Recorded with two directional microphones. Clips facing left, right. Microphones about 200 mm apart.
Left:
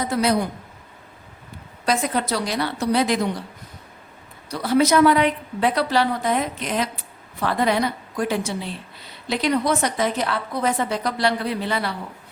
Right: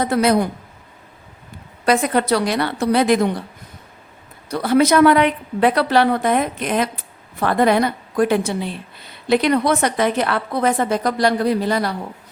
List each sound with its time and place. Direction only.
0.0 s a woman's voice: 60° right (ahead or behind)
1.8 s a woman's voice: 60° right (ahead or behind)
4.4 s a woman's voice: 55° right (ahead or behind)